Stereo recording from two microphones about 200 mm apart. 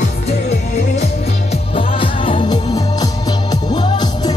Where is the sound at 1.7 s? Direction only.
25° left (ahead or behind).